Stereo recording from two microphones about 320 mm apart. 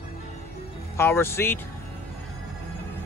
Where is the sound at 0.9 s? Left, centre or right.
Centre.